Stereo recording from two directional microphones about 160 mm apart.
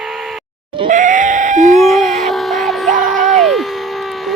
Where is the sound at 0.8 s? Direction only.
50° right (ahead or behind).